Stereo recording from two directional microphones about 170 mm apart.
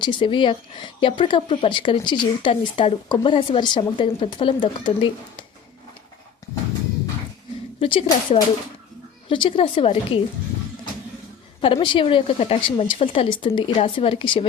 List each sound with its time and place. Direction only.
0.0 s speech: 30° left (ahead or behind)
7.8 s a woman's voice: 30° left (ahead or behind)
11.6 s a woman's voice: 30° left (ahead or behind)